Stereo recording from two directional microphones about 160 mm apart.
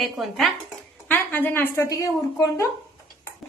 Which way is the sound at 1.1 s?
10° left (ahead or behind).